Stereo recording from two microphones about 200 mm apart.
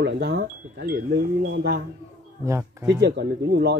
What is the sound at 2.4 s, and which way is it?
Speech, 15° right (ahead or behind).